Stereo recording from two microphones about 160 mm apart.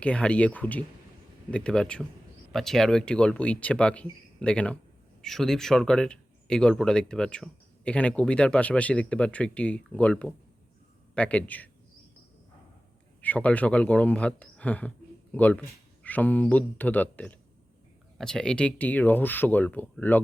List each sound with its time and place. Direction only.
0.0 s a man's voice: 5° left (ahead or behind)
13.2 s a man's voice: 10° left (ahead or behind)